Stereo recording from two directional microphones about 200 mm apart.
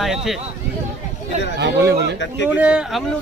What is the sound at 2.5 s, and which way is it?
Speech, 5° right (ahead or behind).